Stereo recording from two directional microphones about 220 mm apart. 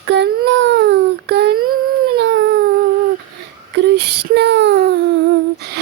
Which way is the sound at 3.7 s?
50° right (ahead or behind).